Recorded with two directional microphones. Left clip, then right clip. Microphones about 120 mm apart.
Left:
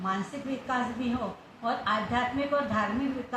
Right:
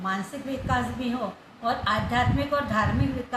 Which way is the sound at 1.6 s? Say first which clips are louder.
Right 3 dB; 20° right (ahead or behind).